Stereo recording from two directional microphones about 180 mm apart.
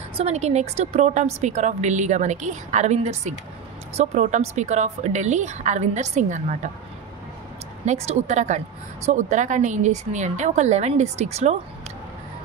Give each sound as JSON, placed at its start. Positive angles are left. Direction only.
{"t": 0.2, "sound": "a woman's voice", "side_deg": -35}
{"t": 7.8, "sound": "a woman's voice", "side_deg": -40}